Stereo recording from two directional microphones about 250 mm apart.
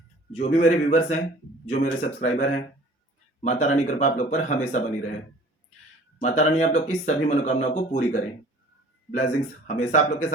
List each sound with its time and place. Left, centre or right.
0.3 s speech: left
3.8 s speech: left
6.1 s speech: left